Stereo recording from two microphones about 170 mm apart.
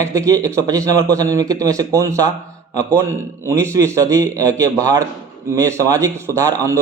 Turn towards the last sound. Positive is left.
turn(degrees=-20)  # may be behind; listen again after turning